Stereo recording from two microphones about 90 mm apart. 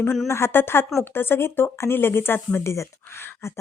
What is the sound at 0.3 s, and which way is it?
Speech, 30° left (ahead or behind).